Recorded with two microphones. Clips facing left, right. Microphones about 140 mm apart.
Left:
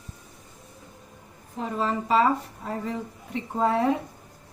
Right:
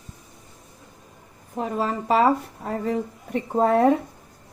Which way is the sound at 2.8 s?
45° right (ahead or behind).